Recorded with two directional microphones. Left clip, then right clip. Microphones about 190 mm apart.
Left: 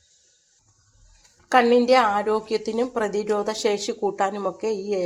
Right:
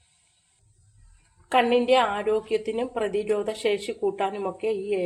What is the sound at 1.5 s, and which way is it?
A woman's voice, 20° left (ahead or behind).